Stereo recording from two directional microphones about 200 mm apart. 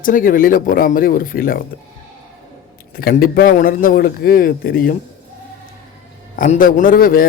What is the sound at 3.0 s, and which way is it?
A man's voice, 45° left (ahead or behind).